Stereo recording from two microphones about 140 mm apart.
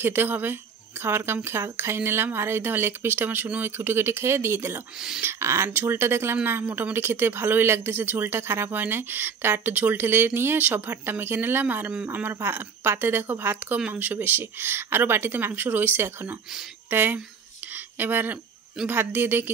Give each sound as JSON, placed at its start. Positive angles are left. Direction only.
{"t": 0.0, "sound": "speech", "side_deg": -15}